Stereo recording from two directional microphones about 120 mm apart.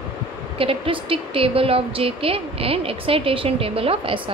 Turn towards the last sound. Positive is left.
turn(degrees=-50)  # may be behind; listen again after turning